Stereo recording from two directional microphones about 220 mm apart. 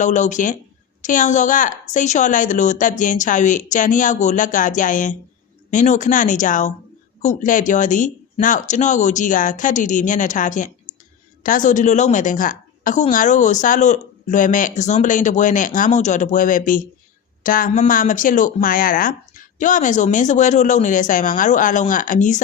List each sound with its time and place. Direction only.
0.0 s a woman's voice: 35° left (ahead or behind)